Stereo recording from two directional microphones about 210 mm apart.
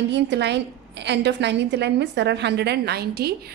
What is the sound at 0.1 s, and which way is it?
A woman's voice, 55° right (ahead or behind).